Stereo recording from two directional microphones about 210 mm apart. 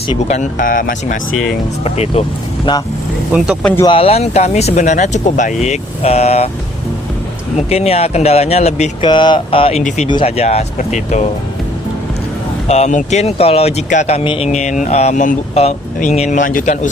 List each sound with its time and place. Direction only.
0.3 s speech: 35° left (ahead or behind)
1.8 s speech: 30° left (ahead or behind)
3.3 s speech: 5° right (ahead or behind)
3.8 s speech: 25° left (ahead or behind)
7.5 s speech: 30° left (ahead or behind)
12.6 s speech: 30° left (ahead or behind)